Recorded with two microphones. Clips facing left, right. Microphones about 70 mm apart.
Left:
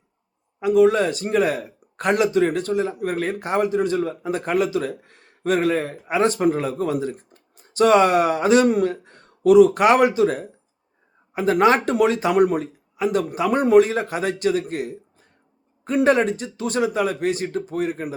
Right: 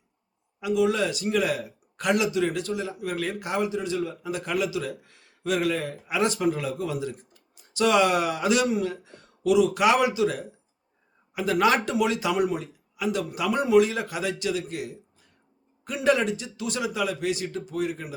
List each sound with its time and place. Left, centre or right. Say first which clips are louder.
0.6 s speech: left 7 dB; left